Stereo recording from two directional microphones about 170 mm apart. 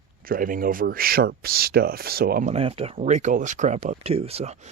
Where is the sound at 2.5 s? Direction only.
35° right (ahead or behind).